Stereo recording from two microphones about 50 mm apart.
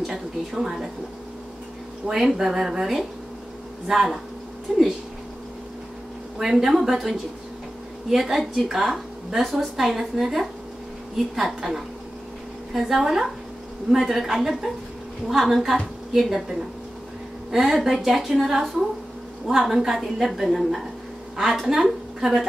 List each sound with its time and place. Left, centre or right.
0.0 s a sound: centre
2.0 s a woman's voice: centre
6.3 s a woman's voice: centre